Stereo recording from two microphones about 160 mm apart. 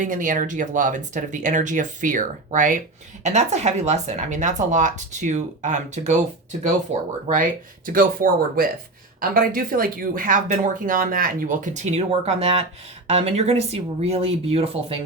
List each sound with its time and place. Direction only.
0.0 s speech: 55° right (ahead or behind)
7.3 s speech: 55° right (ahead or behind); by 14.9 s 40° right (ahead or behind)